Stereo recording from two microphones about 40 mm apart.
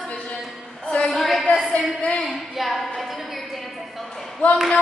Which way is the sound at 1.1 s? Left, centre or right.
Centre.